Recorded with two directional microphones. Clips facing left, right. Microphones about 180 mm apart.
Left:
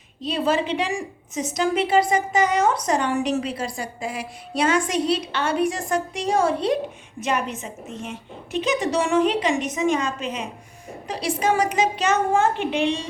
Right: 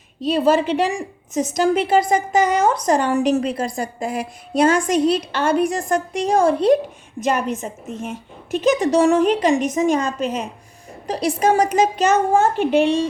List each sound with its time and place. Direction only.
0.3 s a woman's voice: 45° right (ahead or behind)